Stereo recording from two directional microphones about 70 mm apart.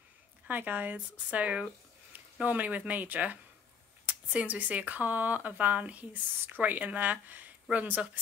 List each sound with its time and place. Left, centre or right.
0.5 s speech: right